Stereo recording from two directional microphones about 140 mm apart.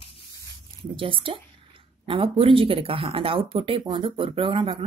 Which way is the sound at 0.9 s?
40° right (ahead or behind).